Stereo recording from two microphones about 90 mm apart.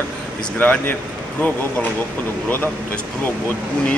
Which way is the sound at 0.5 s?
20° left (ahead or behind).